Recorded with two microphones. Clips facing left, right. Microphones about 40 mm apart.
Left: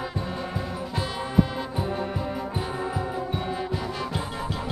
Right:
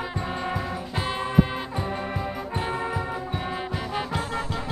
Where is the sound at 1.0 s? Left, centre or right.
Right.